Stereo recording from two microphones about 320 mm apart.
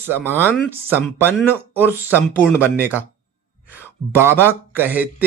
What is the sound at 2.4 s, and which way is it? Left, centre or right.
Speech, centre.